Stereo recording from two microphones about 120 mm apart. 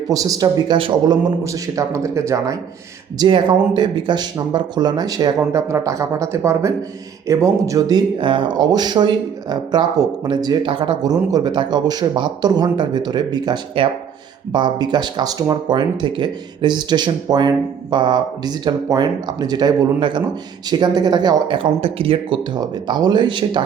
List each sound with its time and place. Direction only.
0.1 s a man's voice: 30° right (ahead or behind)
0.8 s a man's voice: 40° right (ahead or behind); by 2.6 s 25° right (ahead or behind)
3.2 s speech: 40° right (ahead or behind)
22.5 s speech: 35° right (ahead or behind)